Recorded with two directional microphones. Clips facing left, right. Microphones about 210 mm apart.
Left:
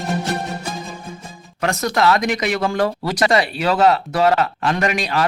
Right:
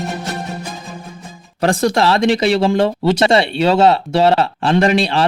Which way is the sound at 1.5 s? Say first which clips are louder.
Right 5 dB; 30° right (ahead or behind).